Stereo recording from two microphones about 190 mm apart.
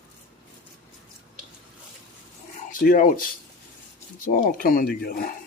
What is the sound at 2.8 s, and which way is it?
Speech, 45° left (ahead or behind).